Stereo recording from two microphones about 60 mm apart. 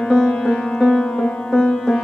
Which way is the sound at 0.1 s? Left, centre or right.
Centre.